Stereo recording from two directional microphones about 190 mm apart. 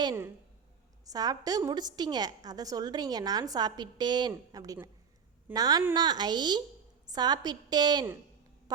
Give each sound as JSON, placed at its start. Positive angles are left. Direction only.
{"t": 0.0, "sound": "a woman's voice", "side_deg": -15}